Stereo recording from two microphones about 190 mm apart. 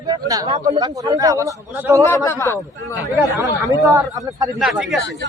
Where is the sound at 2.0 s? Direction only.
15° left (ahead or behind).